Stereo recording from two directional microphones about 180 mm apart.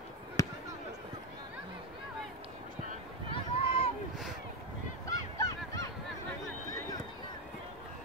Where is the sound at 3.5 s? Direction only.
30° left (ahead or behind).